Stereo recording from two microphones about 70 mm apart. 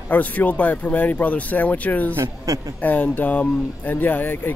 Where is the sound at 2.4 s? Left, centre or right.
Right.